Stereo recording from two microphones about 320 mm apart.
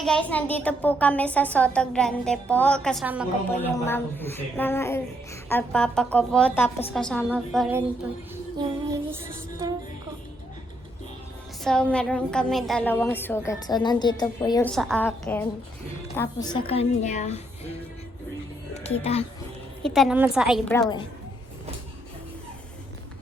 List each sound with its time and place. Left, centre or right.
0.0 s a woman's voice: centre
9.1 s music: centre
11.6 s a woman's voice: centre; by 17.7 s left
18.7 s music: centre
19.8 s a woman's voice: centre
20.7 s speech: centre